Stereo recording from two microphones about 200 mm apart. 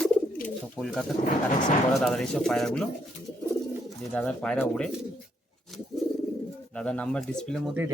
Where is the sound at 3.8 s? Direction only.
5° left (ahead or behind).